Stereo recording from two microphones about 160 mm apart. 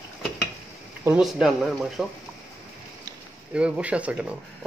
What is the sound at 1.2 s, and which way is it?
Speech, centre (ahead or behind).